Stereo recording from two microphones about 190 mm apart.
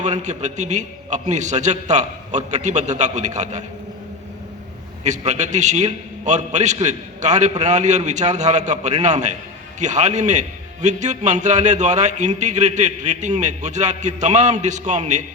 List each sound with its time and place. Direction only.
0.0 s a man's voice: 40° right (ahead or behind)
5.0 s a man's voice: 40° right (ahead or behind)